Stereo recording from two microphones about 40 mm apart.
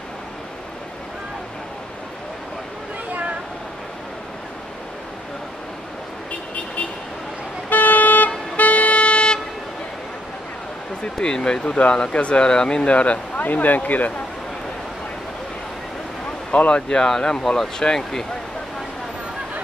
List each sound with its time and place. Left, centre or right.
3.1 s a sound: right
7.7 s vehicle: left
11.1 s speech: centre
13.4 s speech: left
16.5 s speech: left
16.9 s speech: centre